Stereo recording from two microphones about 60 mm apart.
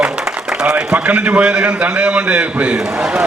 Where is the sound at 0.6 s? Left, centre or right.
Right.